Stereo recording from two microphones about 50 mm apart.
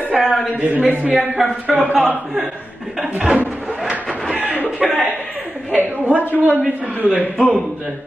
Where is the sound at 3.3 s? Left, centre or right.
Right.